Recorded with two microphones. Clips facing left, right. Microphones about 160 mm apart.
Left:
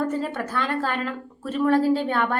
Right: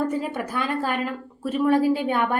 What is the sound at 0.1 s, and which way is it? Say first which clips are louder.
A woman's voice: even; 10° right (ahead or behind).